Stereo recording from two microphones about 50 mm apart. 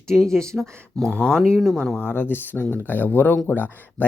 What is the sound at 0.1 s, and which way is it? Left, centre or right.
Speech, centre.